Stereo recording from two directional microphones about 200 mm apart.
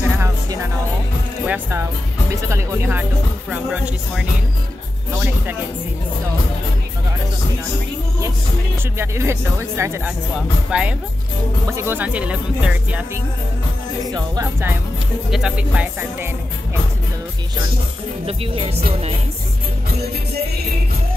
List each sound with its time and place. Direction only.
1.4 s speech: 10° right (ahead or behind)
8.9 s speech: 15° right (ahead or behind)
14.1 s speech: 15° right (ahead or behind)
18.2 s speech: 25° right (ahead or behind)